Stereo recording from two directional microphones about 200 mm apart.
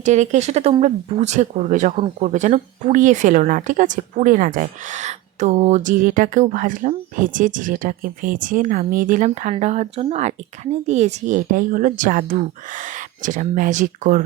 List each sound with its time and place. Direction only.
0.0 s speech: 35° right (ahead or behind)